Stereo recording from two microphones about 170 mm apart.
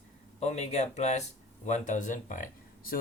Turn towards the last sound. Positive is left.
turn(degrees=55)  # may be behind; listen again after turning